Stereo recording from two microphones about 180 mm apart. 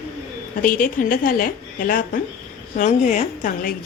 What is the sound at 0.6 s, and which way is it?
A woman's voice, 50° left (ahead or behind).